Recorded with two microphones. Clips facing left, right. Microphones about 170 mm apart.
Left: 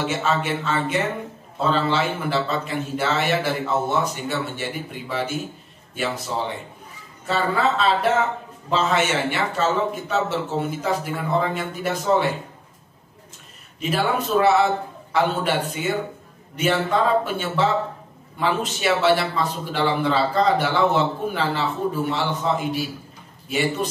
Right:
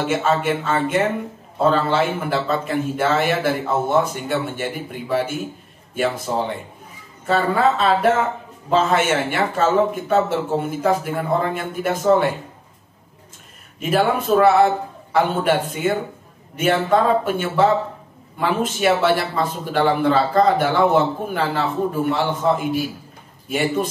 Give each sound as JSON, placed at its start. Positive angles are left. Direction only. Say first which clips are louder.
{"t": 0.0, "sound": "a man's voice", "louder": "right 4 dB", "side_deg": -50}
{"t": 13.7, "sound": "a man's voice", "louder": "right 4 dB", "side_deg": -50}